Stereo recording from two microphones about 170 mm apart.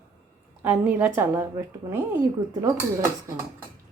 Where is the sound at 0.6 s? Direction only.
10° right (ahead or behind).